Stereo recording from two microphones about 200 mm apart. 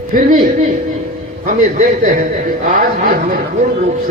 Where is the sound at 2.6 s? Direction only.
45° right (ahead or behind).